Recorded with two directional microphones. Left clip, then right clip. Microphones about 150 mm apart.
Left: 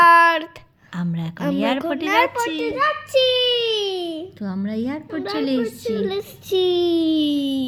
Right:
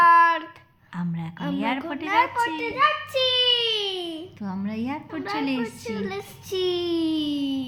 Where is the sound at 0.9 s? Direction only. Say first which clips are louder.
Left 4 dB; 50° left (ahead or behind).